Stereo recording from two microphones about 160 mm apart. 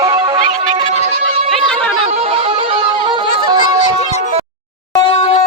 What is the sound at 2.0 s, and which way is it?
Music, 40° right (ahead or behind).